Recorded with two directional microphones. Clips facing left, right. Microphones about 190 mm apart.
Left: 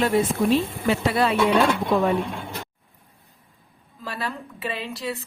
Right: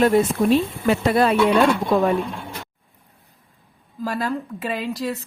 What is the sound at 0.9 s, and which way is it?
Speech, 45° right (ahead or behind).